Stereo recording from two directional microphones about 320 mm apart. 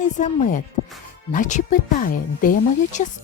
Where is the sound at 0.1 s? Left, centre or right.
Left.